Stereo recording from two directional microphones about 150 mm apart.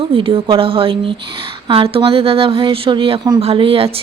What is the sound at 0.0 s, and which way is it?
A woman's voice, 40° right (ahead or behind).